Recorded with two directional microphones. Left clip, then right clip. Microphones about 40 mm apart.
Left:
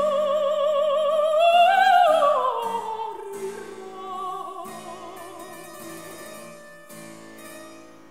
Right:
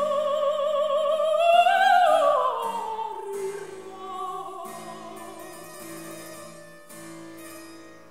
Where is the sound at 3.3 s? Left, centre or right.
Right.